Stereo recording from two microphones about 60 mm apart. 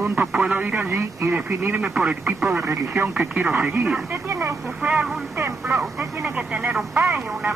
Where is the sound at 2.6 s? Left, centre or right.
Right.